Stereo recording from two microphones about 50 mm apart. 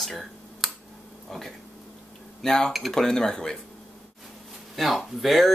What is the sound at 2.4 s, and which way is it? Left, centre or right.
Speech, centre.